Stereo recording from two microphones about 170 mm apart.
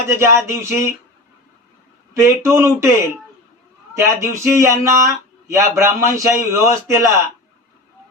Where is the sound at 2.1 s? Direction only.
15° right (ahead or behind).